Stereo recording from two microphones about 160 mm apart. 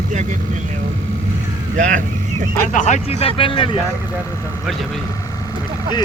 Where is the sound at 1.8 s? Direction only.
50° right (ahead or behind).